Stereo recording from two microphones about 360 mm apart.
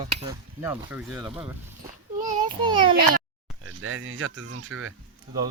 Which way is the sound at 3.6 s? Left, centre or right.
Right.